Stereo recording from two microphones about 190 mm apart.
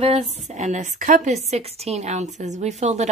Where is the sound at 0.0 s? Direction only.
35° right (ahead or behind).